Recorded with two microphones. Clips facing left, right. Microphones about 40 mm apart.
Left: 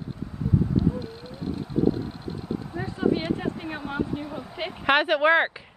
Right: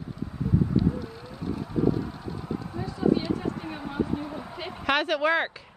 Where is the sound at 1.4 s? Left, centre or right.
Right.